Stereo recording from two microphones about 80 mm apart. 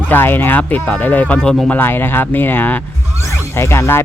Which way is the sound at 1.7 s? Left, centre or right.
Left.